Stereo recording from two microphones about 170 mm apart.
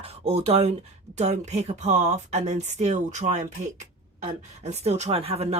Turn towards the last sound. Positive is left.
turn(degrees=-35)  # may be behind; listen again after turning